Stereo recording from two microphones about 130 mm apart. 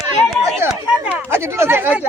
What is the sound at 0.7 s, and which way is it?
Speech, 10° right (ahead or behind).